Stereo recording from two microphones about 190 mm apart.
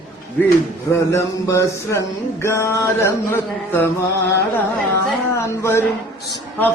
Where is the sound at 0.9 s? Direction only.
15° left (ahead or behind).